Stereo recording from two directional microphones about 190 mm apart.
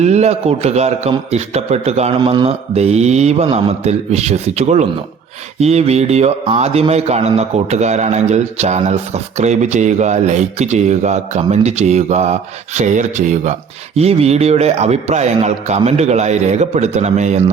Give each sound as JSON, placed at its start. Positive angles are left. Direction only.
{"t": 0.0, "sound": "a man's voice", "side_deg": -35}